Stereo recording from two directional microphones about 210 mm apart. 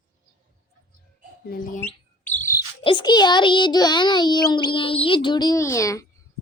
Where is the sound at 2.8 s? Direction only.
20° left (ahead or behind).